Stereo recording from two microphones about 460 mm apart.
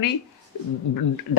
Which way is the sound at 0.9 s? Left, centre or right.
Left.